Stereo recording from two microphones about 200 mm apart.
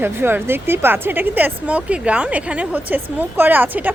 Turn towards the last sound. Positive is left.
turn(degrees=-10)  # may be behind; listen again after turning